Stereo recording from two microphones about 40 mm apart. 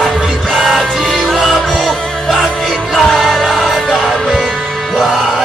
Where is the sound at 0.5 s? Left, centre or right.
Centre.